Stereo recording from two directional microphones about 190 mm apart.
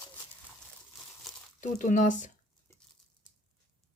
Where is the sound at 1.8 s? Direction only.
40° left (ahead or behind).